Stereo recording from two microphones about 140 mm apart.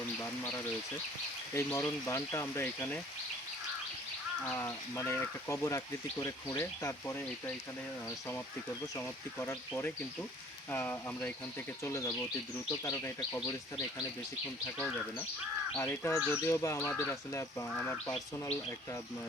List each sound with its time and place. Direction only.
0.2 s speech: 20° left (ahead or behind)
4.5 s speech: 20° left (ahead or behind)
9.0 s speech: 15° left (ahead or behind)
15.9 s speech: 20° left (ahead or behind)